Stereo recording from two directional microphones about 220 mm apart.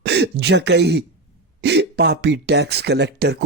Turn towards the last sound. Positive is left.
turn(degrees=-50)  # may be behind; listen again after turning